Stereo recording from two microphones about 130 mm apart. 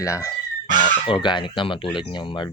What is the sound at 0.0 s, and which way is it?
Speech, 25° left (ahead or behind).